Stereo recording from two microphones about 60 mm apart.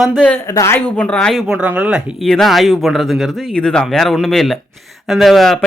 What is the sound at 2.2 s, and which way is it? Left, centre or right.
Speech, centre.